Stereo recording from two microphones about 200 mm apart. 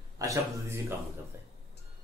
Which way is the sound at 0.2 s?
15° right (ahead or behind).